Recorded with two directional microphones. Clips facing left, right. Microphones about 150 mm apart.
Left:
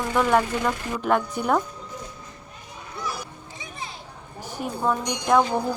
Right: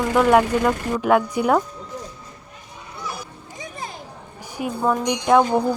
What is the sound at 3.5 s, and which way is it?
Children playing, 45° right (ahead or behind).